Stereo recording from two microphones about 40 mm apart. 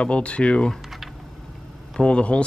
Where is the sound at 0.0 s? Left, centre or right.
Left.